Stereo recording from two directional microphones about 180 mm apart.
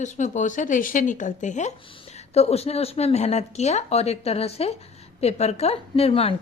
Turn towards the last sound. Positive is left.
turn(degrees=30)  # may be behind; listen again after turning